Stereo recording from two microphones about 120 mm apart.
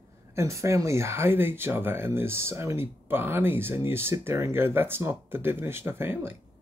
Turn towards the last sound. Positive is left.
turn(degrees=-20)  # may be behind; listen again after turning